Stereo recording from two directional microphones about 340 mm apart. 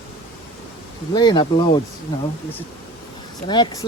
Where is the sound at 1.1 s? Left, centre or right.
Centre.